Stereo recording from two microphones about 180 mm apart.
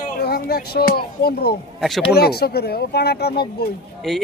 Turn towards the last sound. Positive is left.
turn(degrees=0)  # may be behind; listen again after turning